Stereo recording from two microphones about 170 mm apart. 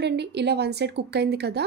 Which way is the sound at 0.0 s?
80° right.